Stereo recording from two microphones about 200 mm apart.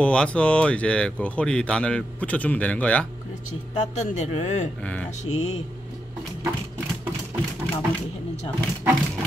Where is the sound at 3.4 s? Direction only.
35° left (ahead or behind).